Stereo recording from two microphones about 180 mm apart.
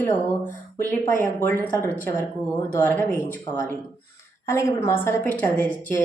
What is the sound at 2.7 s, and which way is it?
A woman's voice, 10° left (ahead or behind).